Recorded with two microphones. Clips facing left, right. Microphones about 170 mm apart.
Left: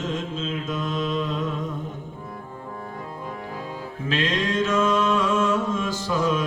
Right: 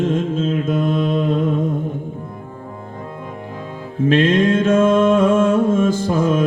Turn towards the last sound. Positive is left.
turn(degrees=-50)  # may be behind; listen again after turning